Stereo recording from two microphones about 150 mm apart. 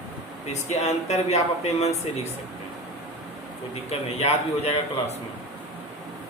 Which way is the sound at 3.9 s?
45° left (ahead or behind).